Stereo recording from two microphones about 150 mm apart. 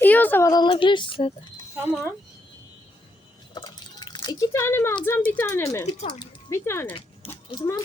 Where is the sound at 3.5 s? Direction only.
30° left (ahead or behind).